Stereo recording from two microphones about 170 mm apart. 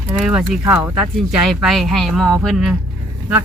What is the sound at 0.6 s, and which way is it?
Speech, 15° right (ahead or behind).